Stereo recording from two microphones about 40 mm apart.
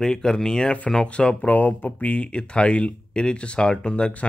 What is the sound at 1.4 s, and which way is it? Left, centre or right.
Speech, left.